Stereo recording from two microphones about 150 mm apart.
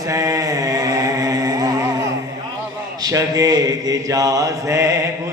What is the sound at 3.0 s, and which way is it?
Mantra, 25° right (ahead or behind).